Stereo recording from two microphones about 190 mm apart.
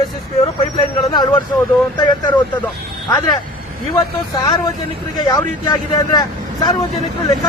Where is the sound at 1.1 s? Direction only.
25° left (ahead or behind).